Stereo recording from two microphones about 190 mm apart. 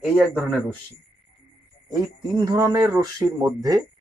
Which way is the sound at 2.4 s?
20° right (ahead or behind).